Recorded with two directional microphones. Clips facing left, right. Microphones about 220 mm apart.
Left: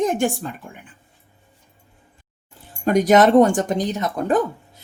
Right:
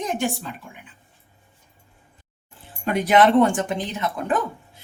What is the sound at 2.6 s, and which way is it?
A woman's voice, 45° left (ahead or behind).